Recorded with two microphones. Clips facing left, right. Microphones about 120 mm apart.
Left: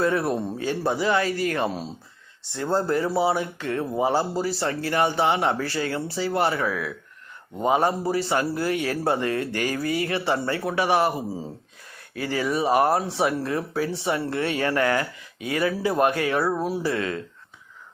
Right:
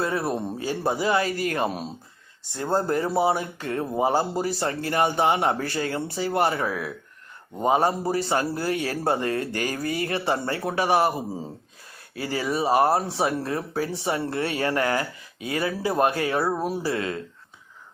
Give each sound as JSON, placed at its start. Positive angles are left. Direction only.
{"t": 0.0, "sound": "speech", "side_deg": -30}
{"t": 0.3, "sound": "speech", "side_deg": -15}
{"t": 0.9, "sound": "speech", "side_deg": -40}
{"t": 1.6, "sound": "speech", "side_deg": -20}
{"t": 2.7, "sound": "speech", "side_deg": -40}
{"t": 16.5, "sound": "speech", "side_deg": -15}
{"t": 16.8, "sound": "speech", "side_deg": -30}